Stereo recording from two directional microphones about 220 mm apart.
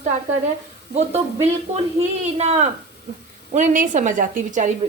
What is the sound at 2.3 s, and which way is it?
A woman's voice, 30° right (ahead or behind).